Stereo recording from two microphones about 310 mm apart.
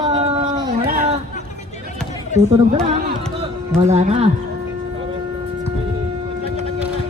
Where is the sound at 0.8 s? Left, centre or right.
Right.